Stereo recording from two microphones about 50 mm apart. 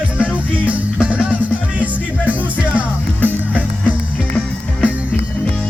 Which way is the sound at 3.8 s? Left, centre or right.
Left.